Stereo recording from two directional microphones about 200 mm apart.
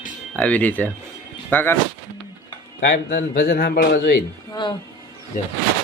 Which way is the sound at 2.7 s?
55° left (ahead or behind).